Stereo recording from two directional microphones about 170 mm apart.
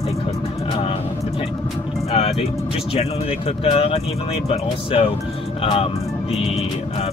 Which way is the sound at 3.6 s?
35° left (ahead or behind).